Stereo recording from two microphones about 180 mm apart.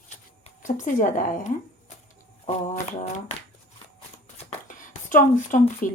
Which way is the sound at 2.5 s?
40° left (ahead or behind).